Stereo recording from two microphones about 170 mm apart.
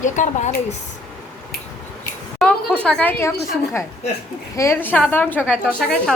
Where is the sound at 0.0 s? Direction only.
45° left (ahead or behind).